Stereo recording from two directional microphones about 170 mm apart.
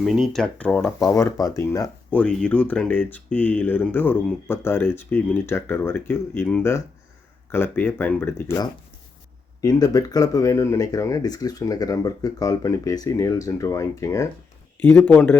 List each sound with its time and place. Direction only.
0.0 s speech: centre (ahead or behind); by 1.9 s 20° left (ahead or behind)
2.1 s speech: 5° left (ahead or behind)